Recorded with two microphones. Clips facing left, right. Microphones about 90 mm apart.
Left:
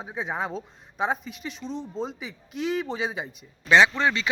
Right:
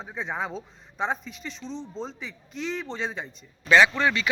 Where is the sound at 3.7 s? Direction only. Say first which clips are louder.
Even; 20° left (ahead or behind).